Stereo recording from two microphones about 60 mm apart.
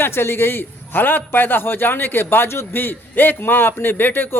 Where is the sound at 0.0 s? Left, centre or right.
Left.